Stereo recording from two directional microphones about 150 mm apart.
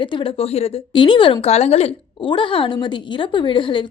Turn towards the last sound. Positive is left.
turn(degrees=35)  # may be behind; listen again after turning